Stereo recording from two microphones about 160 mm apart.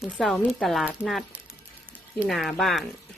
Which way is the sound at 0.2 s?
Centre (ahead or behind).